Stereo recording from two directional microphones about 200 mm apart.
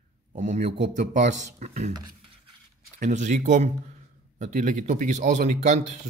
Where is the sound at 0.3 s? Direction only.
35° right (ahead or behind).